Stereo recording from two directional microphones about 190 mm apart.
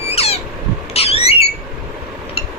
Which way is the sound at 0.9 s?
30° left (ahead or behind).